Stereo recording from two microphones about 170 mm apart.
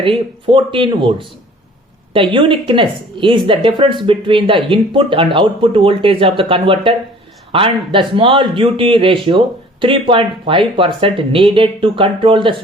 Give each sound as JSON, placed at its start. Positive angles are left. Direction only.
{"t": 0.0, "sound": "a woman's voice", "side_deg": -30}
{"t": 2.1, "sound": "a woman's voice", "side_deg": -30}